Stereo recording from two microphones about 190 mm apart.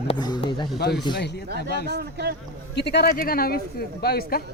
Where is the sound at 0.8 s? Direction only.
60° left (ahead or behind).